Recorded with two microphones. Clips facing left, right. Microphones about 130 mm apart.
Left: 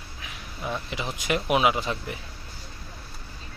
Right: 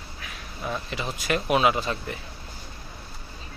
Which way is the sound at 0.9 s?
15° left (ahead or behind).